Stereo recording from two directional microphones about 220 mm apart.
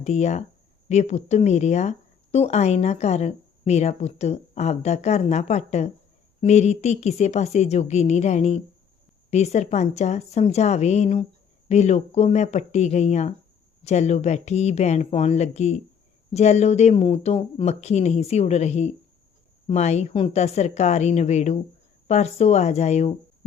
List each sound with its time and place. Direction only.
0.0 s speech: 30° left (ahead or behind)